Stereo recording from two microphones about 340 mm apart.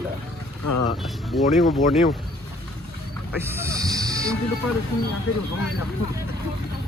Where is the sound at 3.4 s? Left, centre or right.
Centre.